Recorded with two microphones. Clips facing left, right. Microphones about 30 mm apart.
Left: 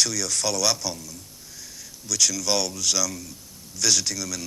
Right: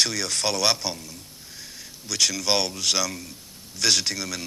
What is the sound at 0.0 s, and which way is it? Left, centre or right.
Speech, right.